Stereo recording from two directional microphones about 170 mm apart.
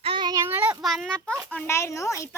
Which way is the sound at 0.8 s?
Centre (ahead or behind).